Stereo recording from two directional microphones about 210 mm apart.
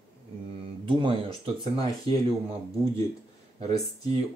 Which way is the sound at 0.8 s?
25° right (ahead or behind).